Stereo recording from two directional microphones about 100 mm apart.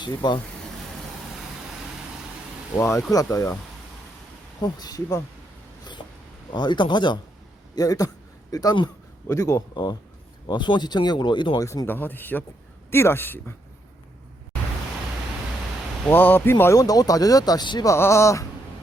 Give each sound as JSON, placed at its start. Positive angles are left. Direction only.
{"t": 0.0, "sound": "speech", "side_deg": 50}
{"t": 2.7, "sound": "speech", "side_deg": 30}
{"t": 4.6, "sound": "speech", "side_deg": 40}
{"t": 6.5, "sound": "speech", "side_deg": 50}
{"t": 7.8, "sound": "a sound", "side_deg": 35}
{"t": 9.2, "sound": "speech", "side_deg": 30}
{"t": 9.7, "sound": "speech", "side_deg": 50}
{"t": 11.6, "sound": "speech", "side_deg": 30}
{"t": 16.0, "sound": "speech", "side_deg": 20}
{"t": 16.7, "sound": "speech", "side_deg": 35}
{"t": 17.8, "sound": "speech", "side_deg": 25}